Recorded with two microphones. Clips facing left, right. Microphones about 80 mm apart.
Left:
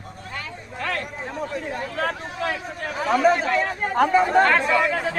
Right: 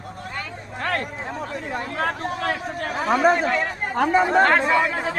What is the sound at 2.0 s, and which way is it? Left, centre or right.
Speech, right.